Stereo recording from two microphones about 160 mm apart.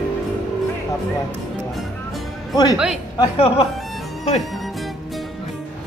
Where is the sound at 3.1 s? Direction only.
35° left (ahead or behind).